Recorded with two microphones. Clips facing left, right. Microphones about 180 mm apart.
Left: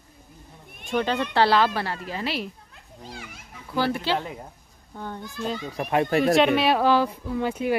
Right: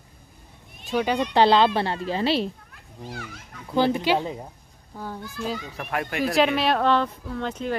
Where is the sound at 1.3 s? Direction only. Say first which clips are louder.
Right 3 dB; 20° right (ahead or behind).